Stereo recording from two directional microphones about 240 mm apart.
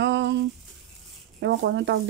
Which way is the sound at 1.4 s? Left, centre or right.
Right.